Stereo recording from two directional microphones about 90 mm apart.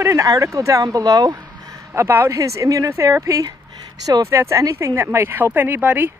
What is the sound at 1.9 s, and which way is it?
Speech, 30° right (ahead or behind).